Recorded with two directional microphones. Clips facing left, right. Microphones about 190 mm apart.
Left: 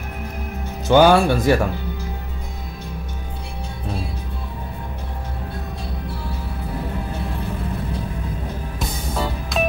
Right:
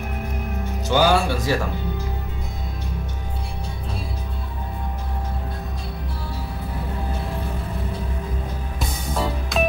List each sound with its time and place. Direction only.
0.8 s speech: 55° left (ahead or behind)
8.7 s music: centre (ahead or behind)